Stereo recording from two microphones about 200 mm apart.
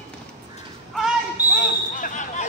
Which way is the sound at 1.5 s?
40° left (ahead or behind).